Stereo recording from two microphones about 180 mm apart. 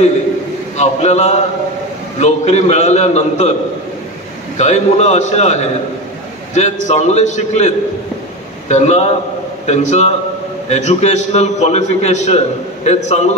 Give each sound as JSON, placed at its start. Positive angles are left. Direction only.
{"t": 0.7, "sound": "a man's voice", "side_deg": 40}
{"t": 4.6, "sound": "a man's voice", "side_deg": 40}